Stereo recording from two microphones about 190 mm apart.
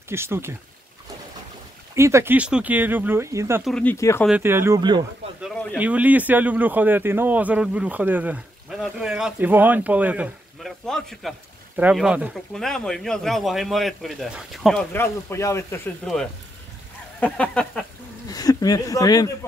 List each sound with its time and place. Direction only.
0.1 s speech: 15° right (ahead or behind)
2.0 s speech: 15° right (ahead or behind)
3.6 s speech: 5° left (ahead or behind)
3.9 s speech: 15° left (ahead or behind)
4.3 s speech: 10° right (ahead or behind)
5.4 s a sound: 5° left (ahead or behind)
5.8 s speech: 10° right (ahead or behind)
14.9 s speech: 10° left (ahead or behind)
17.2 s speech: 5° left (ahead or behind)
18.3 s speech: 20° left (ahead or behind)